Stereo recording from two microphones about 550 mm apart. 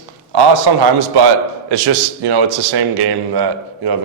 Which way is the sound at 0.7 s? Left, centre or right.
Right.